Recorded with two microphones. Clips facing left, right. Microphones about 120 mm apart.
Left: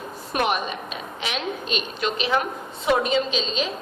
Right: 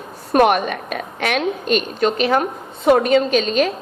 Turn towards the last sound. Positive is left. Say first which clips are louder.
# right 8 dB
turn(degrees=-55)  # may be behind; listen again after turning